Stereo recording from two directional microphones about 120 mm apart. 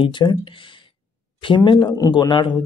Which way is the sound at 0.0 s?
40° left (ahead or behind).